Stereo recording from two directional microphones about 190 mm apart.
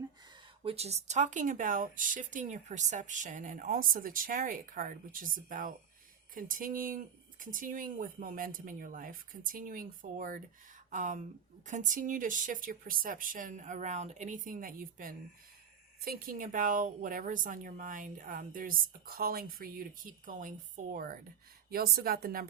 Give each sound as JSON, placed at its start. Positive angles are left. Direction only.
{"t": 0.6, "sound": "a woman's voice", "side_deg": -30}